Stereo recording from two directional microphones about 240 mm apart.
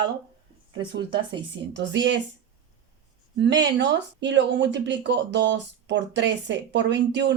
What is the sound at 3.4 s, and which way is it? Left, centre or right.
Speech, right.